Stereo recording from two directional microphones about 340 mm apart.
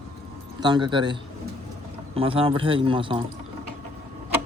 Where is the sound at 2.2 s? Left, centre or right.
Centre.